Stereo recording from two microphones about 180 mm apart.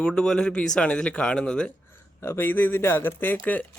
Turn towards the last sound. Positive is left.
turn(degrees=10)  # may be behind; listen again after turning